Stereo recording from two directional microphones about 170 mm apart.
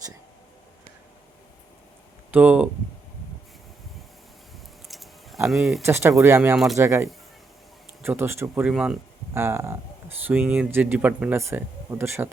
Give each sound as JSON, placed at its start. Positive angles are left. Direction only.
{"t": 2.3, "sound": "speech", "side_deg": -10}
{"t": 4.9, "sound": "a sound", "side_deg": 0}
{"t": 5.5, "sound": "speech", "side_deg": 0}
{"t": 5.8, "sound": "speech", "side_deg": -15}